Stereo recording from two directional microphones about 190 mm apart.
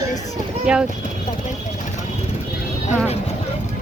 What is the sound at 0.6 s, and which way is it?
Speech, 5° right (ahead or behind).